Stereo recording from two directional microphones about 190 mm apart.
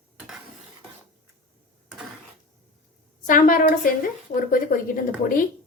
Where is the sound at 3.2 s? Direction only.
45° left (ahead or behind).